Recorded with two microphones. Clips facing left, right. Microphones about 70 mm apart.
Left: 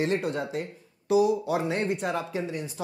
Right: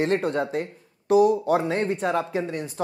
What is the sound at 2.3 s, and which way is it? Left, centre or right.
Speech, right.